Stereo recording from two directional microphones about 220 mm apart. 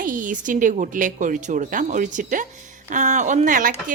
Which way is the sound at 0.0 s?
35° right (ahead or behind).